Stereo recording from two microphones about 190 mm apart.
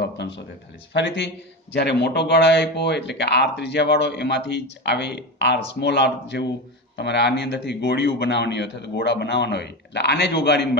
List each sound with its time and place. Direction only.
0.0 s a man's voice: 65° left (ahead or behind)